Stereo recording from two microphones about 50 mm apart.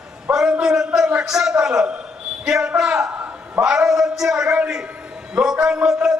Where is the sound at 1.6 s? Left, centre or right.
Centre.